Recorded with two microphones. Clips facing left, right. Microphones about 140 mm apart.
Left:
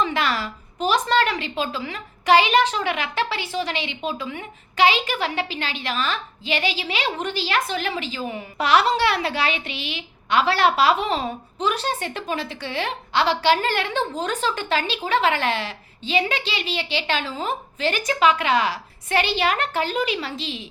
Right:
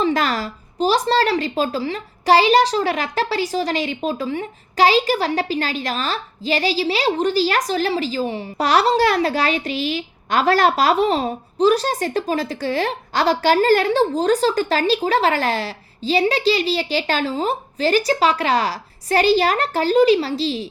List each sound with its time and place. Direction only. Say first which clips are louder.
0.0 s a woman's voice: right 4 dB; 40° right (ahead or behind)